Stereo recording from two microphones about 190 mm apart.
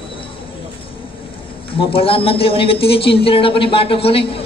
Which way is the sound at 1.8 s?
30° left (ahead or behind).